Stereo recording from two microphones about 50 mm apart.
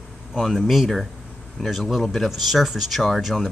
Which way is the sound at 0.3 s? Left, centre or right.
Centre.